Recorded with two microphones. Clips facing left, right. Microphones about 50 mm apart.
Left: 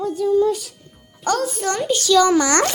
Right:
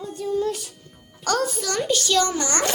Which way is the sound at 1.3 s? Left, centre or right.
Left.